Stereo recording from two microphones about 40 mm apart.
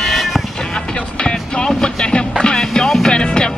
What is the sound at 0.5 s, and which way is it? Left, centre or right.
Music, centre.